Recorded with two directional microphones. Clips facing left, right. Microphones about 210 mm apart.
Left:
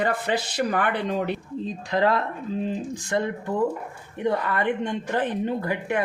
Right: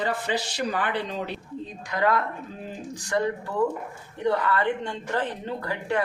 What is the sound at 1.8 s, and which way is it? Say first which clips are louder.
A man's voice: left 2 dB; 30° left (ahead or behind).